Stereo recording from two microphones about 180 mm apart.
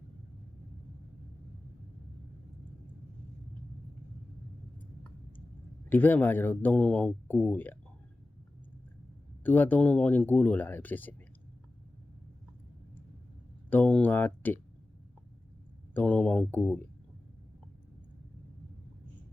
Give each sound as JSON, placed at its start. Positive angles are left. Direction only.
{"t": 5.9, "sound": "speech", "side_deg": 10}
{"t": 9.4, "sound": "speech", "side_deg": 10}
{"t": 13.7, "sound": "speech", "side_deg": 10}
{"t": 16.0, "sound": "speech", "side_deg": 10}